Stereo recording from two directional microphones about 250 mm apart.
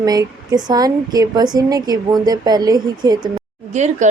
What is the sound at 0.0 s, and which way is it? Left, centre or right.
A woman's voice, centre.